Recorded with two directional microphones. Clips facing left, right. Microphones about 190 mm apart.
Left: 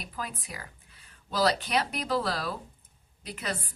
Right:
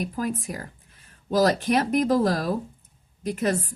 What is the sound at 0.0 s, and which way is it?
A woman's voice, 45° right (ahead or behind).